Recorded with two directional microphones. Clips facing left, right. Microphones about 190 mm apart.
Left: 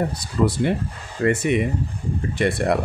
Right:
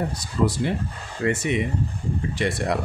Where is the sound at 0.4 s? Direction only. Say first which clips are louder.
Left 3 dB; 50° left (ahead or behind).